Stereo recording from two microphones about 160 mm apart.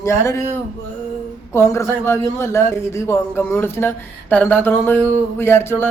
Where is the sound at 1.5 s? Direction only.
15° left (ahead or behind).